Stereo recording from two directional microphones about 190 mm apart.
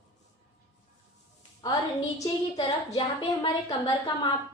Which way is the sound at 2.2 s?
20° left (ahead or behind).